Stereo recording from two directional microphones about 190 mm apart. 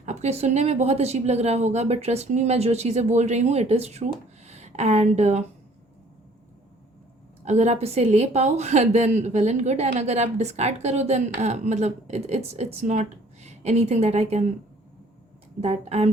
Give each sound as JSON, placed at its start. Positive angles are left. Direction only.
{"t": 0.0, "sound": "a woman's voice", "side_deg": -35}
{"t": 7.4, "sound": "a woman's voice", "side_deg": -35}
{"t": 15.6, "sound": "a woman's voice", "side_deg": -35}